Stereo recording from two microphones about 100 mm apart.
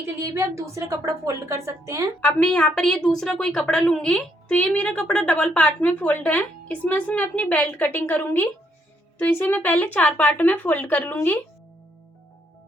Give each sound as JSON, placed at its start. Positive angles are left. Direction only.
{"t": 0.0, "sound": "a woman's voice", "side_deg": -30}
{"t": 2.2, "sound": "a woman's voice", "side_deg": 10}